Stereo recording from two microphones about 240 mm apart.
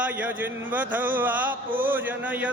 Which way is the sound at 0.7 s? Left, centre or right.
Centre.